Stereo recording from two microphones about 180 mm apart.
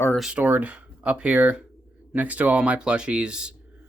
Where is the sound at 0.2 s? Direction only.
5° right (ahead or behind).